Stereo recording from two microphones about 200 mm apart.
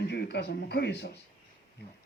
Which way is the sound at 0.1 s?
55° left (ahead or behind).